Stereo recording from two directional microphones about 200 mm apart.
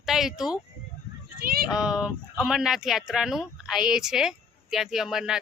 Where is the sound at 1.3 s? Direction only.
50° right (ahead or behind).